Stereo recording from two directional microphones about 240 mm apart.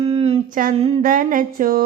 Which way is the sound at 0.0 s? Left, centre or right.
Right.